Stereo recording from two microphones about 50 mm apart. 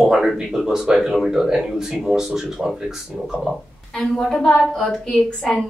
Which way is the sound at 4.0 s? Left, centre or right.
Centre.